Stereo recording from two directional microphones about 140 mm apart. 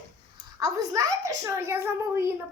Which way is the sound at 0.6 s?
25° right (ahead or behind).